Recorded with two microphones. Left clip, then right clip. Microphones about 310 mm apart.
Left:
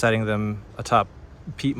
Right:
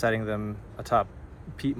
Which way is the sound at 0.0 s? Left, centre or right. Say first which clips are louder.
Left 5 dB; left.